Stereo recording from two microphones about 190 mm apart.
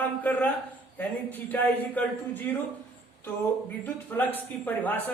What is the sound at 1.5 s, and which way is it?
Speech, 10° left (ahead or behind).